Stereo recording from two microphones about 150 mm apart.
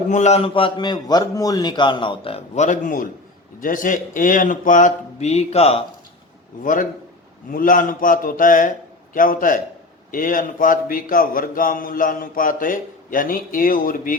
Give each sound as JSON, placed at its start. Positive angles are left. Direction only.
{"t": 0.1, "sound": "a man's voice", "side_deg": 50}
{"t": 2.6, "sound": "speech", "side_deg": 65}
{"t": 6.6, "sound": "a man's voice", "side_deg": 60}